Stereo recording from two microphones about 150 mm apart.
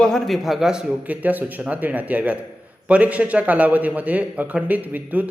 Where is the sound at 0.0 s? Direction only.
Centre (ahead or behind).